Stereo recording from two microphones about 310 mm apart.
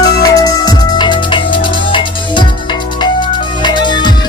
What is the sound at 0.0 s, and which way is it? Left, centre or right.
Music, centre.